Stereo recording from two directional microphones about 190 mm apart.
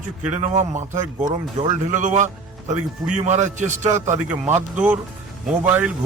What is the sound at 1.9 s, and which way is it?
A man's voice, 40° right (ahead or behind).